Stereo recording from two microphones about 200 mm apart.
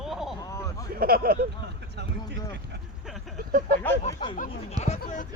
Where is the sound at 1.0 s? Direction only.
50° right (ahead or behind).